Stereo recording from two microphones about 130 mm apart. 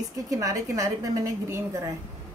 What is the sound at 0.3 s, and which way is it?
A woman's voice, 25° right (ahead or behind).